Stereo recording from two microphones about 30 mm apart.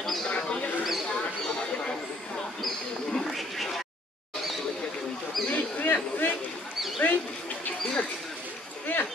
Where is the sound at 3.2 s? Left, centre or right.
Centre.